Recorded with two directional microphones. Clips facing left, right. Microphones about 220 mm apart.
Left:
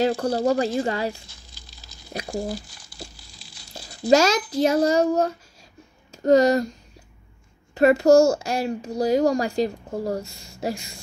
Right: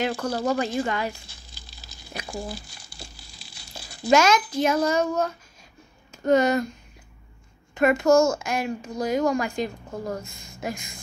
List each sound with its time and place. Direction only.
0.0 s speech: 35° left (ahead or behind)
2.1 s speech: 40° left (ahead or behind)
2.6 s a sound: 10° right (ahead or behind)
3.7 s a child's voice: 35° left (ahead or behind)
7.7 s speech: 35° left (ahead or behind)